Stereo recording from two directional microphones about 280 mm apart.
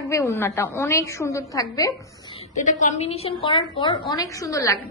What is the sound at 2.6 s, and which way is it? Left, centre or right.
A woman's voice, left.